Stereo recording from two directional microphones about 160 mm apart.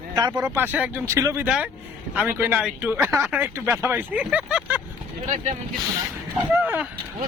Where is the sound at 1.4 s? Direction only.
10° right (ahead or behind).